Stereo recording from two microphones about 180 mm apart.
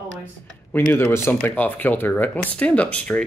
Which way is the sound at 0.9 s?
15° left (ahead or behind).